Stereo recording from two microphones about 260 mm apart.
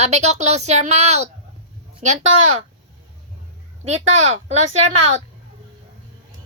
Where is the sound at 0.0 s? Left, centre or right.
Right.